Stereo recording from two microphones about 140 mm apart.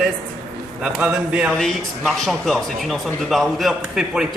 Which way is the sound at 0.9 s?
5° right (ahead or behind).